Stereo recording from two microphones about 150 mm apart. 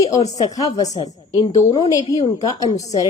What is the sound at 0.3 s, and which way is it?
A woman's voice, 25° left (ahead or behind).